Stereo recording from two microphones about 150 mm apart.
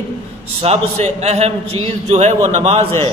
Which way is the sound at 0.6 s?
45° right (ahead or behind).